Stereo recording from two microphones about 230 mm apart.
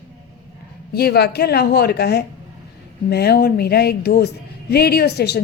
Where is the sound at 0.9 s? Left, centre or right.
Left.